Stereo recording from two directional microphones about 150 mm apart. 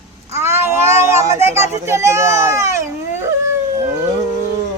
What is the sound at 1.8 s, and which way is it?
A child's voice, 20° right (ahead or behind).